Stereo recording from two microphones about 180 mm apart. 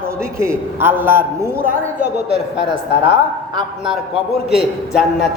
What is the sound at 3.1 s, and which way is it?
Speech, 25° right (ahead or behind).